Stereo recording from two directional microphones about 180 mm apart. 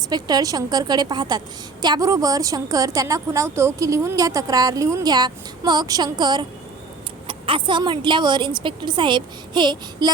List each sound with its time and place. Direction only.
0.1 s a woman's voice: 20° right (ahead or behind)